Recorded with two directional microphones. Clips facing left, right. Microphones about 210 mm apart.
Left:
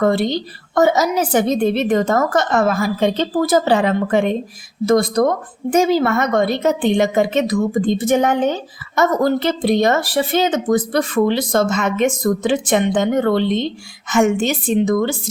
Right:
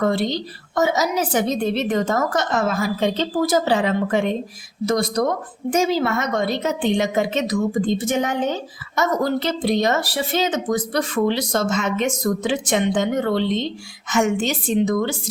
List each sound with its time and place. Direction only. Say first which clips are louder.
0.0 s a woman's voice: left 4 dB; 55° left (ahead or behind)